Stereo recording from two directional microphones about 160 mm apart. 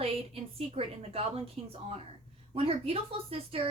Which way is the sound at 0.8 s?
35° right (ahead or behind).